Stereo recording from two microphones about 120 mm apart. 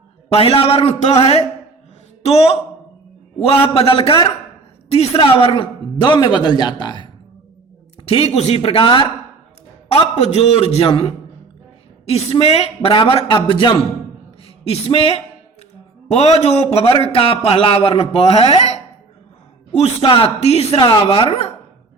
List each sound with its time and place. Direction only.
0.3 s a man's voice: 55° left (ahead or behind); by 7.0 s 40° left (ahead or behind)
8.0 s a man's voice: 60° left (ahead or behind)
9.9 s a man's voice: 60° left (ahead or behind); by 13.7 s 40° left (ahead or behind)
14.4 s a man's voice: 55° left (ahead or behind)
20.1 s a man's voice: 50° left (ahead or behind)